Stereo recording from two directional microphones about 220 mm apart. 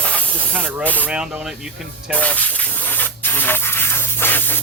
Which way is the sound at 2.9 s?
10° left (ahead or behind).